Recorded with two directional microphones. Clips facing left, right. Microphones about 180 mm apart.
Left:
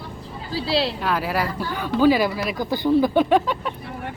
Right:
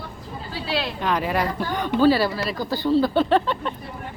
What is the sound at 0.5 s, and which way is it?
Speech, 35° left (ahead or behind).